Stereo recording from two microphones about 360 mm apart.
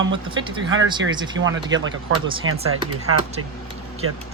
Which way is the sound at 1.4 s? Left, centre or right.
Right.